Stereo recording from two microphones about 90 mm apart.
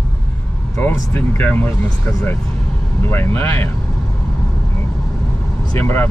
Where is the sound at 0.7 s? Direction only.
20° left (ahead or behind).